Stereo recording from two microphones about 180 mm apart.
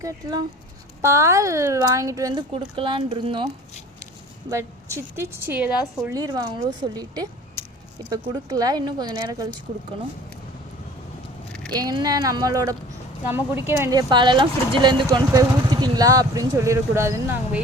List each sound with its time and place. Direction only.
0.0 s speech: 20° right (ahead or behind)
4.4 s speech: 15° right (ahead or behind)
11.7 s speech: 20° right (ahead or behind)
14.1 s speech: 25° right (ahead or behind)